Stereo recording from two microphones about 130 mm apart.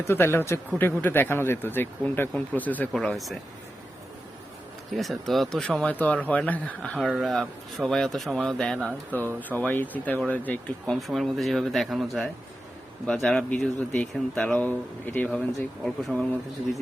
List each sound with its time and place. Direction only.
0.1 s a man's voice: 15° left (ahead or behind)
2.9 s speech: centre (ahead or behind)
4.9 s speech: centre (ahead or behind)
10.9 s speech: centre (ahead or behind)